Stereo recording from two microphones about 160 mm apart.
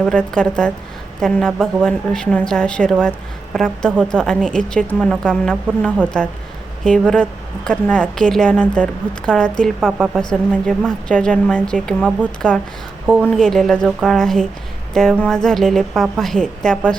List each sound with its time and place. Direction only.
0.0 s a woman's voice: 5° left (ahead or behind)